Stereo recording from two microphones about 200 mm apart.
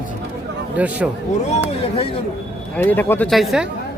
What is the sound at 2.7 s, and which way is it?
Speech, 10° left (ahead or behind).